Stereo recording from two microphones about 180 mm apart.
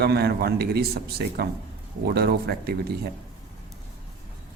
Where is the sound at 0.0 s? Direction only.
65° right (ahead or behind).